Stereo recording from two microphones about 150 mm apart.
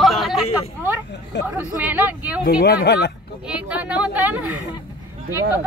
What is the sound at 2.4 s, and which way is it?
Speech, 90° left.